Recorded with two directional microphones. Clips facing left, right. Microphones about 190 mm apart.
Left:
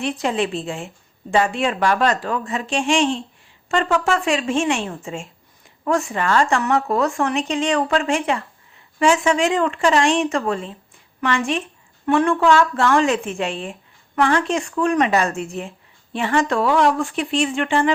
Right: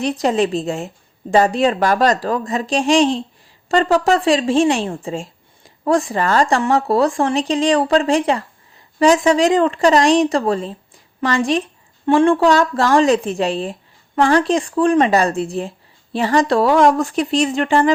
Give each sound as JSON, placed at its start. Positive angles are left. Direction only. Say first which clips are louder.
{"t": 0.0, "sound": "speech", "louder": "right 5 dB", "side_deg": -40}